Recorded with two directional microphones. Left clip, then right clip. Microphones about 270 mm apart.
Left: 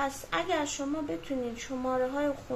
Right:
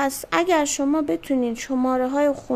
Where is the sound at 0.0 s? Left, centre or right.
Right.